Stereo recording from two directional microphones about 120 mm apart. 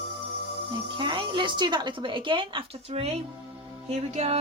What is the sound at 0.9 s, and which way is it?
Speech, 40° right (ahead or behind).